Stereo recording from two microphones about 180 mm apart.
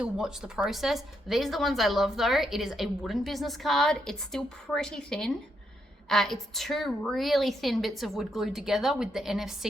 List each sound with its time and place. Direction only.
0.0 s a woman's voice: 5° right (ahead or behind)